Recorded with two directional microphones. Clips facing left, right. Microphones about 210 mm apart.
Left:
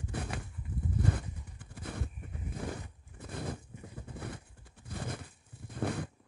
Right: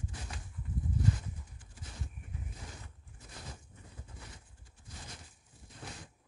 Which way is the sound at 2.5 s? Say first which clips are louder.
Left 12 dB; 60° left (ahead or behind).